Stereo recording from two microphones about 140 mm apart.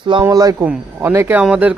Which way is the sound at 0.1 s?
30° right (ahead or behind).